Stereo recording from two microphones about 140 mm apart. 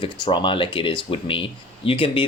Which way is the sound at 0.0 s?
35° left (ahead or behind).